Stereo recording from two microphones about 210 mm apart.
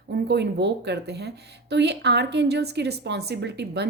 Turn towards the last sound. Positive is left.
turn(degrees=-55)  # may be behind; listen again after turning